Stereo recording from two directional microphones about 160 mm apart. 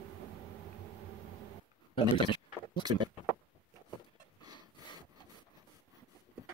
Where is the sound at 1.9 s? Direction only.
30° left (ahead or behind).